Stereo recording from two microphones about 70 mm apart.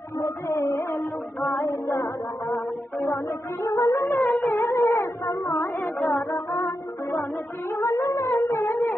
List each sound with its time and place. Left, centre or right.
0.2 s music: left
3.6 s wind instrument: left
4.1 s a sound: left
4.6 s music: left